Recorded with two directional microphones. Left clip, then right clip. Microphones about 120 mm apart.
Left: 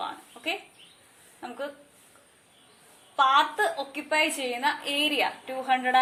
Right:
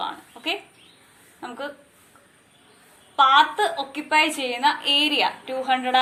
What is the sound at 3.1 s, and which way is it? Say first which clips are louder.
A woman's voice: right 5 dB; 35° left (ahead or behind).